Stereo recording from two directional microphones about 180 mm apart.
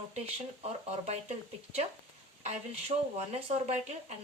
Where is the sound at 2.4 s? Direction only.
40° right (ahead or behind).